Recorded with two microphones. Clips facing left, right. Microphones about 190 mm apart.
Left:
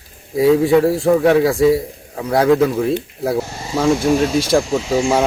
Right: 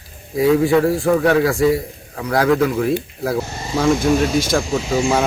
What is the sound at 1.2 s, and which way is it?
Speech, 20° left (ahead or behind).